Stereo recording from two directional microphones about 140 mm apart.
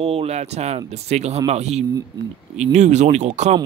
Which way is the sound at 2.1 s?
30° right (ahead or behind).